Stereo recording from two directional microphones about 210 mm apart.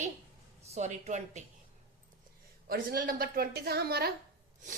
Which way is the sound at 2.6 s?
45° right (ahead or behind).